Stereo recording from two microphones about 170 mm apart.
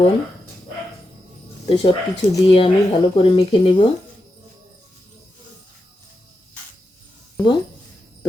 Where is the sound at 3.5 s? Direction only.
30° left (ahead or behind).